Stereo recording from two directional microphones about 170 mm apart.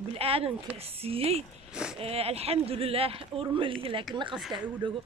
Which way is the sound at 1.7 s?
5° right (ahead or behind).